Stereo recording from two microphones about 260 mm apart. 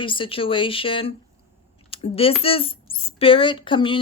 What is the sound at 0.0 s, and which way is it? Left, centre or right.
Speech, centre.